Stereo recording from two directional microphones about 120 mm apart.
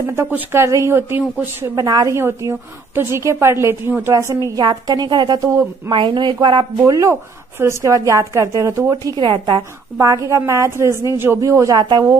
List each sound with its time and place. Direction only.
0.0 s a woman's voice: 20° right (ahead or behind)
1.9 s a woman's voice: 30° right (ahead or behind)
5.9 s a woman's voice: 45° right (ahead or behind)
6.8 s a woman's voice: 25° right (ahead or behind)
9.1 s a woman's voice: 35° right (ahead or behind)
9.9 s a woman's voice: 25° right (ahead or behind)